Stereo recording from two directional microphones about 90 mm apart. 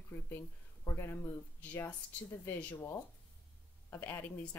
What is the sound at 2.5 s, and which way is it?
Speech, 20° left (ahead or behind).